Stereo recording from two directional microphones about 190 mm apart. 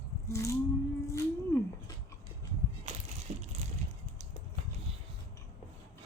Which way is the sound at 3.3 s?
35° right (ahead or behind).